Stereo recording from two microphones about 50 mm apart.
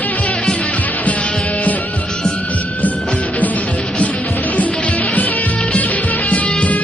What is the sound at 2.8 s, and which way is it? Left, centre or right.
Music, left.